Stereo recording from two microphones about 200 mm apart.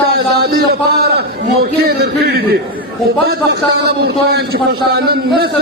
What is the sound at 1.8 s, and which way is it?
A man's voice, 55° right (ahead or behind).